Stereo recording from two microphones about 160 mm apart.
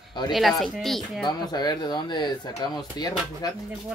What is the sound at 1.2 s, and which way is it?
Speech, 25° left (ahead or behind).